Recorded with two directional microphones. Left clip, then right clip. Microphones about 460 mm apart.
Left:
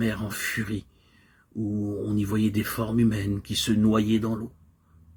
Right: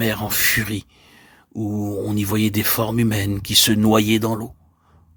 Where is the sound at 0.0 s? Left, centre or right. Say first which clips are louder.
Right 9 dB; right.